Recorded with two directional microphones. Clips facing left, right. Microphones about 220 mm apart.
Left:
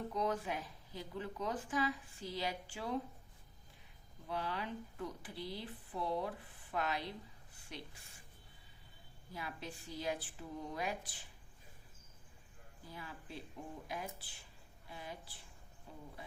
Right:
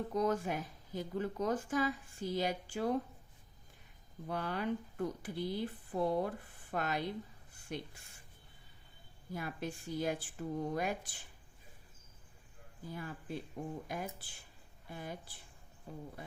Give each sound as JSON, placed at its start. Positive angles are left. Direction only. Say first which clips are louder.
{"t": 0.1, "sound": "speech", "louder": "right 5 dB", "side_deg": -45}
{"t": 4.3, "sound": "speech", "louder": "right 5 dB", "side_deg": -50}
{"t": 9.3, "sound": "speech", "louder": "right 6 dB", "side_deg": -50}
{"t": 12.9, "sound": "speech", "louder": "right 7 dB", "side_deg": -50}